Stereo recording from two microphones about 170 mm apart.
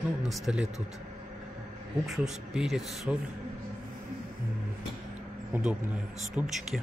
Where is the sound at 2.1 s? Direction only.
Centre (ahead or behind).